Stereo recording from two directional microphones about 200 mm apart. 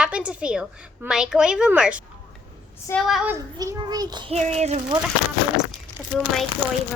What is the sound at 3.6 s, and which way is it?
A child's voice, 20° right (ahead or behind).